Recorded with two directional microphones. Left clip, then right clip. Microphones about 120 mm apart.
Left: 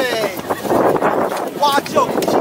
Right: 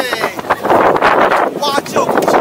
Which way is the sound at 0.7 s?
30° right (ahead or behind).